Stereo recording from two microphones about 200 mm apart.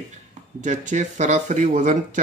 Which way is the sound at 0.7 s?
40° right (ahead or behind).